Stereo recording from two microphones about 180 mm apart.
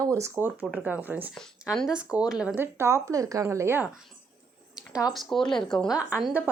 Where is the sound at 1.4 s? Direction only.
Centre (ahead or behind).